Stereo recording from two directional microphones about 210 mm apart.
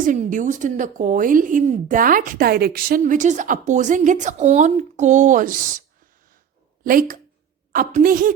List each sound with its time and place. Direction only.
0.0 s a woman's voice: 40° right (ahead or behind)
6.8 s a woman's voice: 40° right (ahead or behind)